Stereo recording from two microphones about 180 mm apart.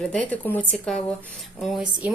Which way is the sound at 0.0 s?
5° left (ahead or behind).